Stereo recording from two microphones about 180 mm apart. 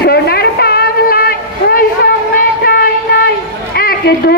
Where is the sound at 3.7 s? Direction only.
60° left (ahead or behind).